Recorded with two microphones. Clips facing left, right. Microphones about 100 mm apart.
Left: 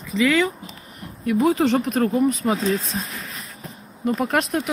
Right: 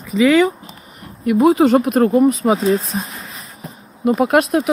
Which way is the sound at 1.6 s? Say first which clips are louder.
Right 7 dB; 15° right (ahead or behind).